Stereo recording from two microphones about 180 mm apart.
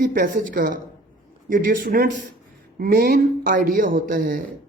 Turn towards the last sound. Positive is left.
turn(degrees=-50)  # may be behind; listen again after turning